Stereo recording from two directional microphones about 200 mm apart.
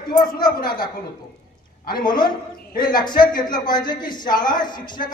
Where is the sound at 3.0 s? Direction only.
20° left (ahead or behind).